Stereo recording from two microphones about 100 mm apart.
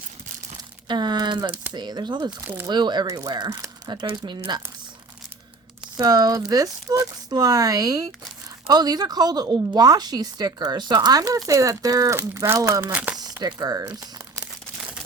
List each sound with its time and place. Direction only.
0.9 s a woman's voice: 45° right (ahead or behind)
6.0 s a woman's voice: 40° right (ahead or behind)
12.8 s speech: 15° right (ahead or behind)
13.1 s speech: 40° right (ahead or behind)